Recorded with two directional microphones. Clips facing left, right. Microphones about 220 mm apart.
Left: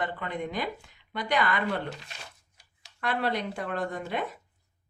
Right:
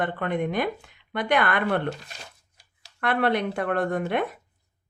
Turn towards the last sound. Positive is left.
turn(degrees=-60)  # may be behind; listen again after turning